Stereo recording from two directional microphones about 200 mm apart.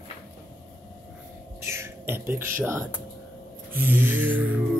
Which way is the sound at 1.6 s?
15° right (ahead or behind).